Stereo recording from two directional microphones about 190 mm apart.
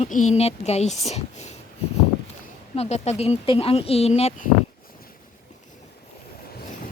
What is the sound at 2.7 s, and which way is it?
A woman's voice, 35° left (ahead or behind).